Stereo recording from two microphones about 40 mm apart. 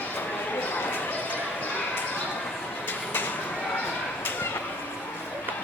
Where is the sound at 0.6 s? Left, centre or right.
Left.